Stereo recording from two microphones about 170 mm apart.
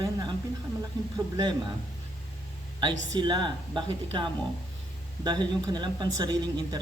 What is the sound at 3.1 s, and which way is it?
Speech, 25° right (ahead or behind).